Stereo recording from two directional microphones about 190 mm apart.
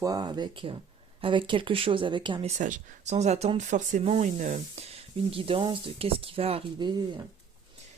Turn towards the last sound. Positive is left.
turn(degrees=-25)  # may be behind; listen again after turning